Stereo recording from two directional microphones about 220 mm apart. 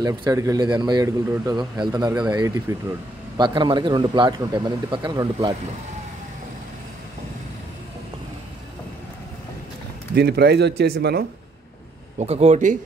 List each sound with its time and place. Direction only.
0.0 s speech: 15° right (ahead or behind)
10.1 s speech: 45° right (ahead or behind)
12.2 s speech: 30° right (ahead or behind)